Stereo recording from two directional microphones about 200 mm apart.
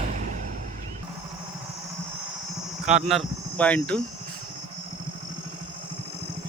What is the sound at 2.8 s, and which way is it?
Speech, centre (ahead or behind).